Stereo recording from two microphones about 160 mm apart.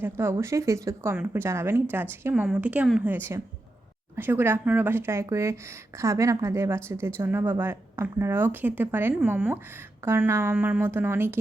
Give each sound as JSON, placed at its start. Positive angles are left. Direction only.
{"t": 0.0, "sound": "speech", "side_deg": -15}